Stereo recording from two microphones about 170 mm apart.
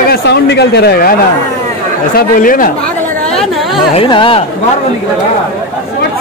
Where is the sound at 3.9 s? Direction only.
30° left (ahead or behind).